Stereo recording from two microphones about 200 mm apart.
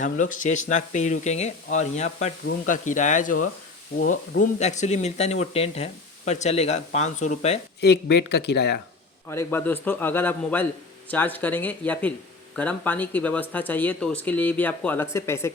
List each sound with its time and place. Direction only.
0.0 s speech: 40° left (ahead or behind)
7.8 s speech: 55° left (ahead or behind)
9.3 s speech: 10° left (ahead or behind)